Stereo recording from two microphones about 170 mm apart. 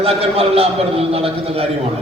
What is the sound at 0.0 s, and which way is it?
A man's voice, 35° right (ahead or behind).